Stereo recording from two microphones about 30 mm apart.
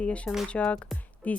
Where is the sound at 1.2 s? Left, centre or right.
Left.